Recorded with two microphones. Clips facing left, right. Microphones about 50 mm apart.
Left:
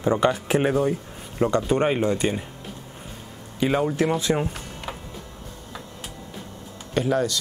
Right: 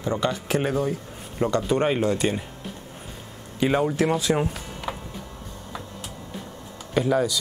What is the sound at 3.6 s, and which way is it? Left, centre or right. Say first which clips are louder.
Speech: even; centre.